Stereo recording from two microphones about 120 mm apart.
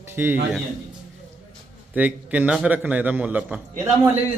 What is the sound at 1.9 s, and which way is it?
A man's voice, 10° right (ahead or behind).